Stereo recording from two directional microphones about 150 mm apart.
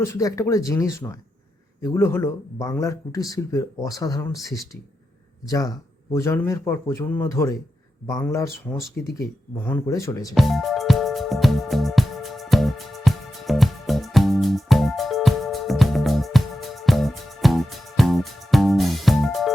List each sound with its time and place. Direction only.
0.0 s speech: 20° left (ahead or behind)
5.5 s speech: 25° left (ahead or behind)
10.3 s music: centre (ahead or behind)